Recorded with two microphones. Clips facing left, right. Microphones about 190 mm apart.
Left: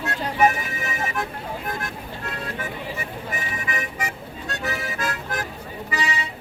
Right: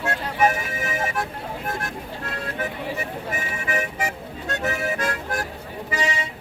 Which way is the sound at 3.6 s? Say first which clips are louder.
Right 3 dB; 45° right (ahead or behind).